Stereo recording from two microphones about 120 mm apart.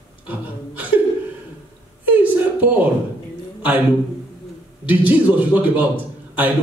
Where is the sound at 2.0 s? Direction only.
15° right (ahead or behind).